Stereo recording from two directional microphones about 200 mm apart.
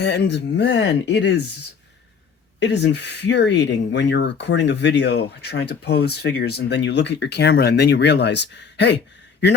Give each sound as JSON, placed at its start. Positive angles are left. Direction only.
{"t": 0.0, "sound": "speech", "side_deg": 60}
{"t": 2.6, "sound": "speech", "side_deg": 60}